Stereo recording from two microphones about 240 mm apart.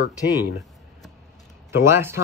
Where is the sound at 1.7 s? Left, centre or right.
Centre.